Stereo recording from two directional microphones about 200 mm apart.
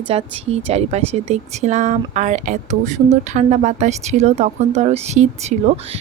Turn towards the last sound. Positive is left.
turn(degrees=-35)  # may be behind; listen again after turning